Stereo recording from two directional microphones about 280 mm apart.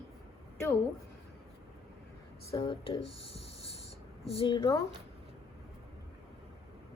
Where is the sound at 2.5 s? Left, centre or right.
Centre.